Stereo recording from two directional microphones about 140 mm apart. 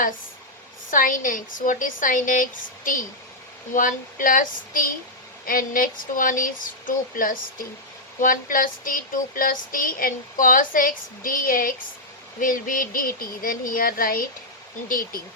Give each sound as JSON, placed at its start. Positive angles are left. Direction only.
{"t": 0.9, "sound": "a woman's voice", "side_deg": 75}
{"t": 3.8, "sound": "child singing", "side_deg": 75}
{"t": 12.4, "sound": "a sound", "side_deg": 75}